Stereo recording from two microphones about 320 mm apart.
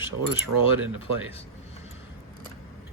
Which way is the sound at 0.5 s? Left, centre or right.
Right.